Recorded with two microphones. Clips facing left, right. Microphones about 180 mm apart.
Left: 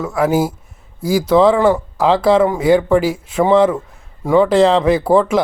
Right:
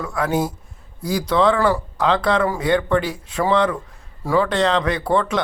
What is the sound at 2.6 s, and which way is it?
Speech, 5° left (ahead or behind).